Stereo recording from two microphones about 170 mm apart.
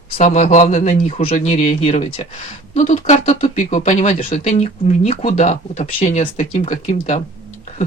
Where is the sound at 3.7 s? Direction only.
45° left (ahead or behind).